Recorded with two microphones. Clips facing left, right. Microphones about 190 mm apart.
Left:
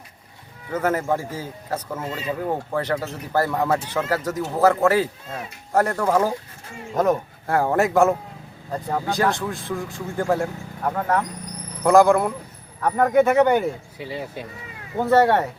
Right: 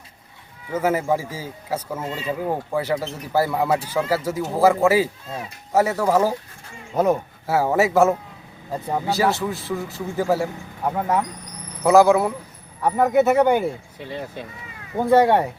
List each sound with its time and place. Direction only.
0.7 s speech: 10° right (ahead or behind)
8.7 s speech: 15° right (ahead or behind)
9.0 s speech: 5° right (ahead or behind)
14.0 s speech: 10° left (ahead or behind)
14.9 s speech: 15° right (ahead or behind)